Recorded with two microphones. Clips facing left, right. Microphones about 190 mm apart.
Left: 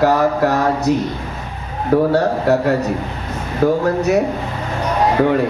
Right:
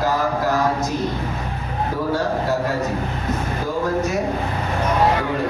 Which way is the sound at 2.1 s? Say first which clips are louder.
Left 6 dB; 65° left (ahead or behind).